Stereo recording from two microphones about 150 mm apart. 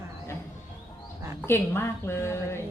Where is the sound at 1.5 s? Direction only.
15° left (ahead or behind).